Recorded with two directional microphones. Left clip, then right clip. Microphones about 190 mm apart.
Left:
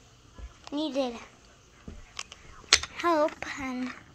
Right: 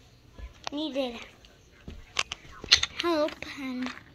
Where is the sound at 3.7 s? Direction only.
20° left (ahead or behind).